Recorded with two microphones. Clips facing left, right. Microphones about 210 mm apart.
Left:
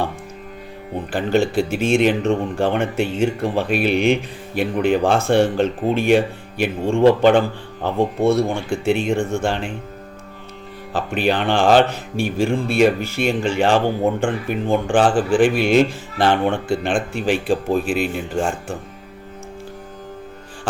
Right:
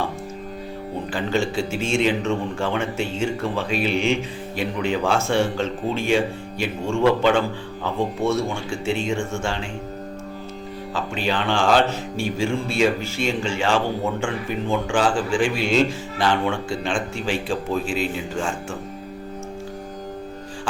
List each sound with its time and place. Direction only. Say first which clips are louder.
1.1 s a man's voice: left 6 dB; 55° left (ahead or behind)
10.9 s speech: left 5 dB; 55° left (ahead or behind)